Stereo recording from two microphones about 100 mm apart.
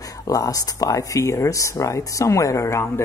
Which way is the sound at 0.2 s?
40° left (ahead or behind).